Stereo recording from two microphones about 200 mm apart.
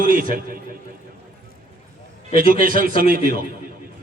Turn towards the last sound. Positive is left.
turn(degrees=-45)  # may be behind; listen again after turning